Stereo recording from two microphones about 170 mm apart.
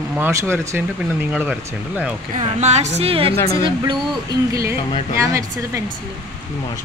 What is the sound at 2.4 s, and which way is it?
Speech, 40° right (ahead or behind).